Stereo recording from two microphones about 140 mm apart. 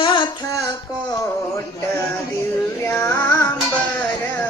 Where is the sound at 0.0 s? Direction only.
35° left (ahead or behind).